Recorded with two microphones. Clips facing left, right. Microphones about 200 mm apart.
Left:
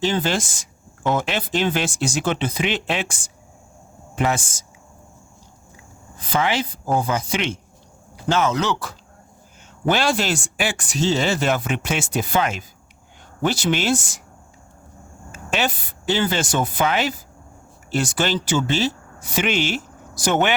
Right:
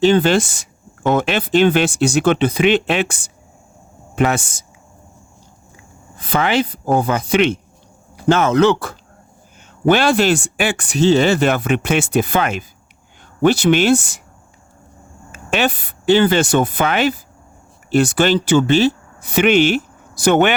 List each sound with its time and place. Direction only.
0.0 s speech: 65° right (ahead or behind)
6.1 s speech: 60° right (ahead or behind)
15.3 s speech: 60° right (ahead or behind)